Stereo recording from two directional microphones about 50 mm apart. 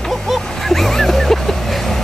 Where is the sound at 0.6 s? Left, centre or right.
Centre.